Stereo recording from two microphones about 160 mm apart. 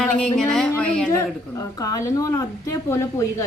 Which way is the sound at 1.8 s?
20° left (ahead or behind).